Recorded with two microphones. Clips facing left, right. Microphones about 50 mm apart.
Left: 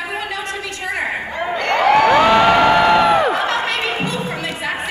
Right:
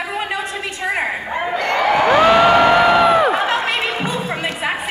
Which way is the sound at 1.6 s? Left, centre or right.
Left.